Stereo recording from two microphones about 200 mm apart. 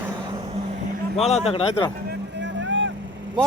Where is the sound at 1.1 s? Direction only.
30° left (ahead or behind).